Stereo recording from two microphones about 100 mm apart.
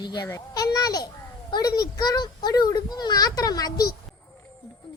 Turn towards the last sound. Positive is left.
turn(degrees=40)  # may be behind; listen again after turning